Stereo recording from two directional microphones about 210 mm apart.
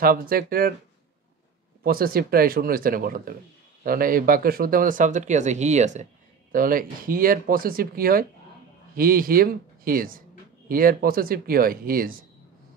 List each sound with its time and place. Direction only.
0.0 s speech: 45° right (ahead or behind)
1.8 s speech: 45° right (ahead or behind)